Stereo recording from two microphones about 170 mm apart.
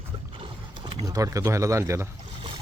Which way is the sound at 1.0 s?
20° right (ahead or behind).